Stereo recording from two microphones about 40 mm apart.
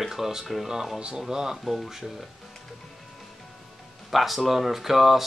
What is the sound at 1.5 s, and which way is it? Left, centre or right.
Speech, centre.